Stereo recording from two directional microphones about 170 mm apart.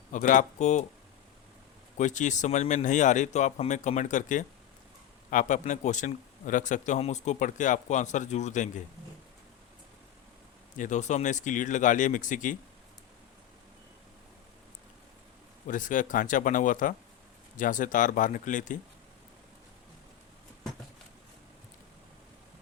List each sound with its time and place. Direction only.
0.1 s speech: 50° left (ahead or behind)
2.0 s speech: 45° left (ahead or behind)
10.8 s speech: 45° left (ahead or behind)
15.6 s speech: 50° left (ahead or behind)